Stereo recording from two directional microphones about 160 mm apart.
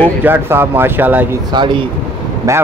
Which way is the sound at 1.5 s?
30° right (ahead or behind).